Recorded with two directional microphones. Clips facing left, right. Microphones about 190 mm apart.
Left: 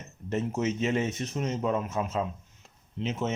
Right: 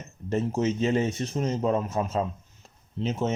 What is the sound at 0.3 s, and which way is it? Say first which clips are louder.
Speech: right 3 dB; 35° right (ahead or behind).